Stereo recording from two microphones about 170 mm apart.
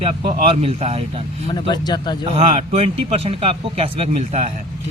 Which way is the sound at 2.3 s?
35° right (ahead or behind).